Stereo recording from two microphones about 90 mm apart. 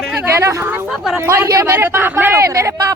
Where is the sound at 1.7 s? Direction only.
20° right (ahead or behind).